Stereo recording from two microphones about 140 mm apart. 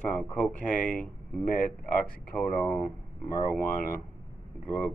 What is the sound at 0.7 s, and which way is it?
Speech, 75° left (ahead or behind).